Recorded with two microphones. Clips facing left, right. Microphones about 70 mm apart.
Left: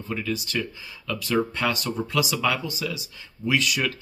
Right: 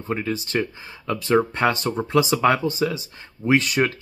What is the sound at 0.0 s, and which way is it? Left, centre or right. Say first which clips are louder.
Speech: right 3 dB; right.